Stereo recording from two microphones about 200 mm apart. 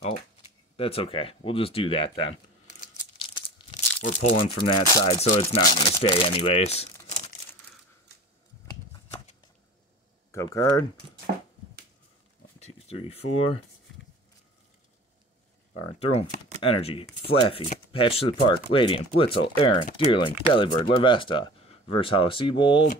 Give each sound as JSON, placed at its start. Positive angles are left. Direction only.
{"t": 0.7, "sound": "speech", "side_deg": 30}
{"t": 3.2, "sound": "crumpling", "side_deg": 25}
{"t": 4.0, "sound": "speech", "side_deg": 35}
{"t": 5.2, "sound": "speech", "side_deg": 35}
{"t": 10.3, "sound": "speech", "side_deg": 15}
{"t": 12.5, "sound": "speech", "side_deg": 30}
{"t": 16.0, "sound": "speech", "side_deg": 30}